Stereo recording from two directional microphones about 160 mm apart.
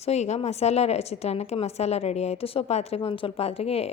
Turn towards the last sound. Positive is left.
turn(degrees=40)  # may be behind; listen again after turning